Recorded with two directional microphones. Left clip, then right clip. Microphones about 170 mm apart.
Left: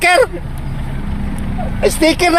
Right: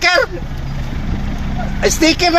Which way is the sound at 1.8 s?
15° left (ahead or behind).